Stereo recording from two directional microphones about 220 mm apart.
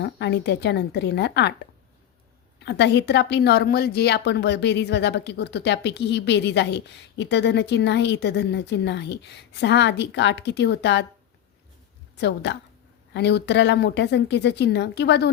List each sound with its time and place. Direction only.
0.0 s a woman's voice: 50° left (ahead or behind)
2.6 s a woman's voice: 50° left (ahead or behind)
12.1 s a woman's voice: 50° left (ahead or behind)